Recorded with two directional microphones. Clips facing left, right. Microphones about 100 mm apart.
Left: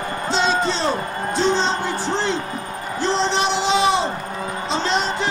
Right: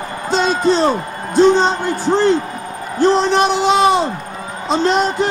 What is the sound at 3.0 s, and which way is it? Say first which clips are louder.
A man's voice: right 7 dB; 50° right (ahead or behind).